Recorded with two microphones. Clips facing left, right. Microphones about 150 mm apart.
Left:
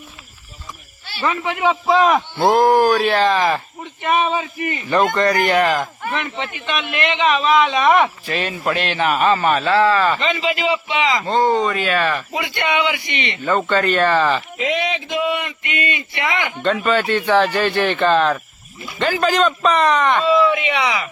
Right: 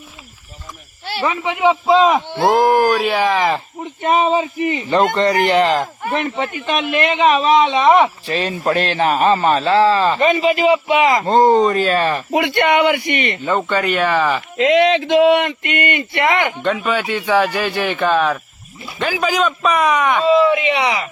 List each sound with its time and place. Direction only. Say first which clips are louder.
1.2 s speech: right 2 dB; 15° right (ahead or behind)
4.0 s speech: right 3 dB; 30° right (ahead or behind)
7.8 s speech: right 3 dB; 15° right (ahead or behind)
8.3 s speech: right 3 dB; 30° right (ahead or behind)
10.9 s speech: right 5 dB; 50° right (ahead or behind)
12.3 s speech: right 7 dB; 60° right (ahead or behind)
13.4 s speech: left 4 dB; 15° right (ahead or behind)
14.7 s speech: right 10 dB; 90° right; by 16.6 s 55° right (ahead or behind)
16.6 s speech: left 1 dB; 10° right (ahead or behind)
20.3 s speech: right 3 dB; 30° right (ahead or behind)